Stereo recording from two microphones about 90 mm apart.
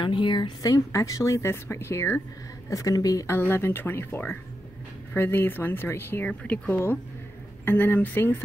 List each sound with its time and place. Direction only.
0.0 s speech: 65° left (ahead or behind)
0.6 s speech: 40° left (ahead or behind)
2.7 s speech: 40° left (ahead or behind)
3.3 s speech: 25° left (ahead or behind)
6.2 s speech: 15° left (ahead or behind)